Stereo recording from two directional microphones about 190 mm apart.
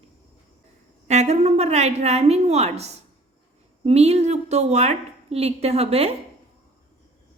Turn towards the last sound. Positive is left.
turn(degrees=-30)  # may be behind; listen again after turning